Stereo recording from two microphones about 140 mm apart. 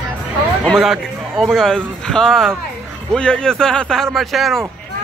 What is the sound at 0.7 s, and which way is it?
Speech, centre (ahead or behind).